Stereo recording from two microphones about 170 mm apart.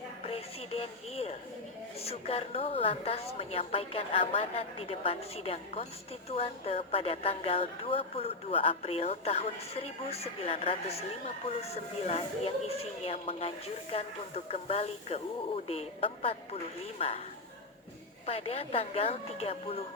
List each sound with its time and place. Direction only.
0.3 s a sound: 35° left (ahead or behind)
2.0 s a woman's voice: 35° left (ahead or behind)
18.3 s a woman's voice: 35° left (ahead or behind)